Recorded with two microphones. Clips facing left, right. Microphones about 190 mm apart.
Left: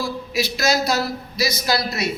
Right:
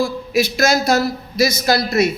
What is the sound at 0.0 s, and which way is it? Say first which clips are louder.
A man's voice: right 6 dB; 50° right (ahead or behind).